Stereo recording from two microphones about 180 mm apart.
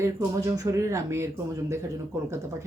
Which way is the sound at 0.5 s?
20° right (ahead or behind).